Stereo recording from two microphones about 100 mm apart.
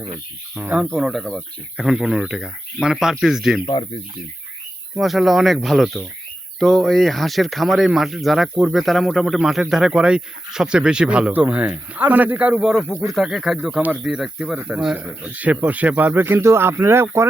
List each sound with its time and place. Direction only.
0.6 s speech: 15° right (ahead or behind); by 1.5 s 5° left (ahead or behind)
1.7 s speech: 5° right (ahead or behind)
3.7 s speech: 55° left (ahead or behind)
4.9 s speech: centre (ahead or behind); by 17.2 s 25° right (ahead or behind)